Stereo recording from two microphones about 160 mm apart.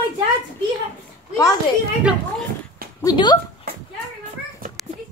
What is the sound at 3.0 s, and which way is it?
Speech, 25° left (ahead or behind).